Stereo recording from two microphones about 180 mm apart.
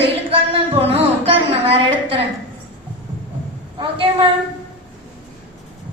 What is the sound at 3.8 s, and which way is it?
Speech, 30° right (ahead or behind).